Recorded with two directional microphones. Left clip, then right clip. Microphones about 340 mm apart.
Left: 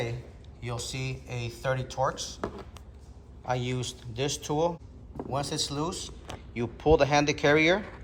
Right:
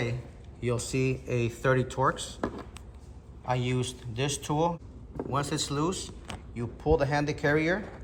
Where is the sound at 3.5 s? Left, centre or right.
Centre.